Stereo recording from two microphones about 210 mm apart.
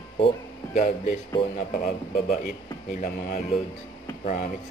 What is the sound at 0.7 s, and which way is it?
Speech, 35° left (ahead or behind).